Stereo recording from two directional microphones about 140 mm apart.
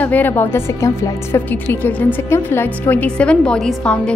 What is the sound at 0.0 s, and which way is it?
A woman's voice, 10° left (ahead or behind).